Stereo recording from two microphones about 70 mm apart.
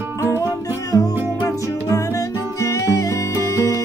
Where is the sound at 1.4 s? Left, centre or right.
Left.